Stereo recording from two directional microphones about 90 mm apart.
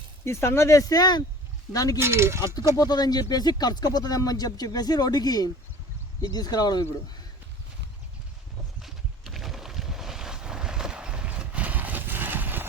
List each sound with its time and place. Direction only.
0.3 s speech: 30° left (ahead or behind)
2.0 s speech: 30° right (ahead or behind)
2.7 s speech: 45° left (ahead or behind)
8.8 s boat: centre (ahead or behind); by 12.6 s 20° right (ahead or behind)